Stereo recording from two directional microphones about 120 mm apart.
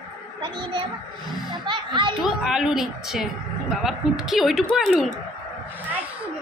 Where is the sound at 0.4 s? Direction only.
40° right (ahead or behind).